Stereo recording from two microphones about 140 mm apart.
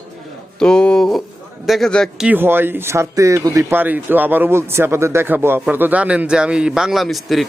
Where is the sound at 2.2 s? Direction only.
15° right (ahead or behind).